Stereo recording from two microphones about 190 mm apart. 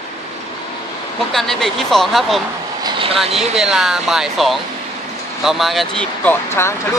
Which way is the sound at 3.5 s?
Centre (ahead or behind).